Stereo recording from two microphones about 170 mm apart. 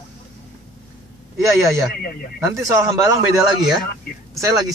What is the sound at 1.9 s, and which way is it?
Speech, 60° left (ahead or behind).